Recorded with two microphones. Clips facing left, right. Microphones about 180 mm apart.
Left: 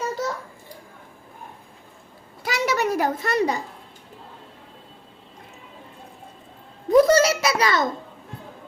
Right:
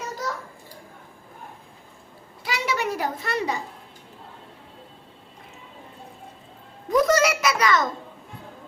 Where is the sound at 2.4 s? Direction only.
45° left (ahead or behind).